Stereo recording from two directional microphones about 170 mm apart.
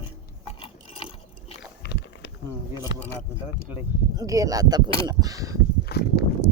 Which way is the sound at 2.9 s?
90° left.